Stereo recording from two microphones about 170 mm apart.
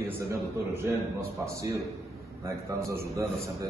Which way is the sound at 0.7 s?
15° right (ahead or behind).